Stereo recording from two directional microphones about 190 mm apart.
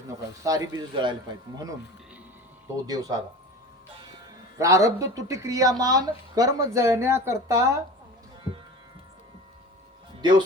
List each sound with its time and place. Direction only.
0.4 s speech: 20° right (ahead or behind)
2.8 s speech: 20° right (ahead or behind)
4.5 s speech: 15° right (ahead or behind)
10.2 s speech: 20° right (ahead or behind)